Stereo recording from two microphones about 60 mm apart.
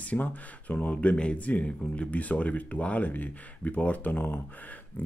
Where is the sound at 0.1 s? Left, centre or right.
Left.